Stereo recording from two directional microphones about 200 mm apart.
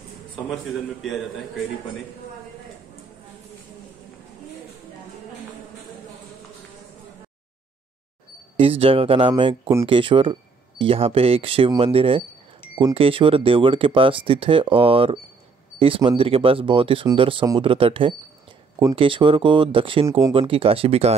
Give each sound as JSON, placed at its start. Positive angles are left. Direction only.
{"t": 1.0, "sound": "a man's voice", "side_deg": 0}
{"t": 8.5, "sound": "speech", "side_deg": -30}